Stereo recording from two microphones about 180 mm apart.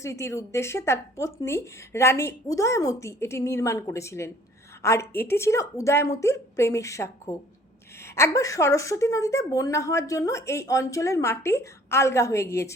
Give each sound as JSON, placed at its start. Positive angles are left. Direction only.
{"t": 0.0, "sound": "a woman's voice", "side_deg": 15}